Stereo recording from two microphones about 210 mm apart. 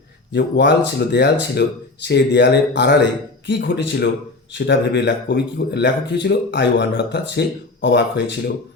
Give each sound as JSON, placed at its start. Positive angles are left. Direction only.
{"t": 0.3, "sound": "a man's voice", "side_deg": 55}